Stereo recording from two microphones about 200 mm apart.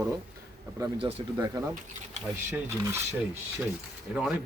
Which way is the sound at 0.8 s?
25° right (ahead or behind).